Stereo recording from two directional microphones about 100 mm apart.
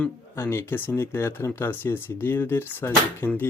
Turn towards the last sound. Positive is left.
turn(degrees=25)  # may be behind; listen again after turning